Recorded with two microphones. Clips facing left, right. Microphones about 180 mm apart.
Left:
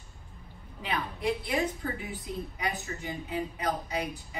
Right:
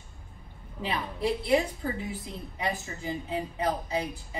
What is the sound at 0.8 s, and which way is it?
A woman's voice, 30° right (ahead or behind).